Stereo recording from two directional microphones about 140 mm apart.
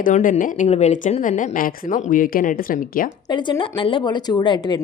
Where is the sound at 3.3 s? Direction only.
35° left (ahead or behind).